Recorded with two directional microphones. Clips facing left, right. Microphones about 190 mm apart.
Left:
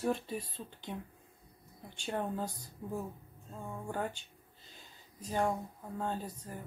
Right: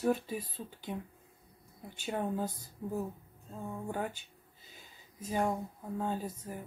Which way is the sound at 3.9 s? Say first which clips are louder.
Even; 5° right (ahead or behind).